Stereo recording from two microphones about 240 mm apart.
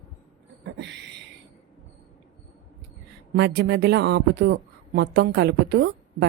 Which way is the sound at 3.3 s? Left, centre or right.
Right.